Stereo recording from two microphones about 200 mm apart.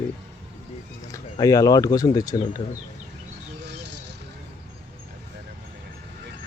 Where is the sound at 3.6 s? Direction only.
60° right (ahead or behind).